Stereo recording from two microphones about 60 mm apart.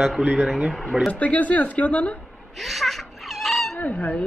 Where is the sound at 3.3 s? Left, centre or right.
Centre.